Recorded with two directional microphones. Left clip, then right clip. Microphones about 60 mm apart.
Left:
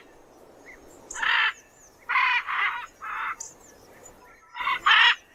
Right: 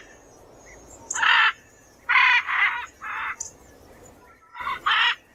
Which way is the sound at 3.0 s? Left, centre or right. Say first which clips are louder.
Right 1 dB; right.